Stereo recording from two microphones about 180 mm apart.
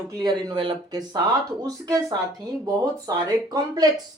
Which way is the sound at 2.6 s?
20° right (ahead or behind).